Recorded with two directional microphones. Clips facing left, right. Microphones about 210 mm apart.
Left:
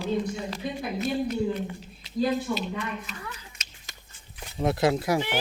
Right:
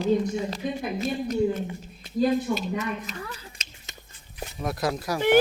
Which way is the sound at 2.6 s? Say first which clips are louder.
Right 3 dB; 40° right (ahead or behind).